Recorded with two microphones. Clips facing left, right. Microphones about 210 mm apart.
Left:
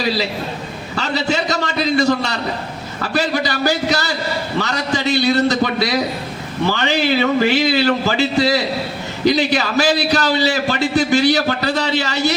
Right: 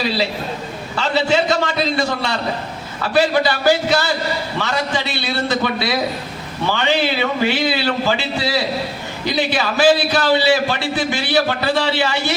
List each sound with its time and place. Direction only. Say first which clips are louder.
0.9 s a man's voice: right 2 dB; 40° left (ahead or behind)